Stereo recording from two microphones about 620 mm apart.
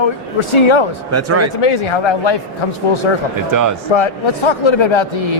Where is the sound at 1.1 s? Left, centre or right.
Right.